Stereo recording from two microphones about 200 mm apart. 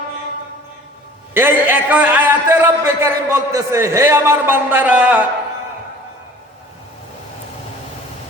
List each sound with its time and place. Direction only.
1.3 s a man's voice: 10° right (ahead or behind)